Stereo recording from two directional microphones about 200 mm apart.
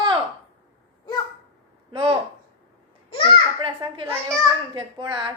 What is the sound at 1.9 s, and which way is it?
Speech, 25° right (ahead or behind).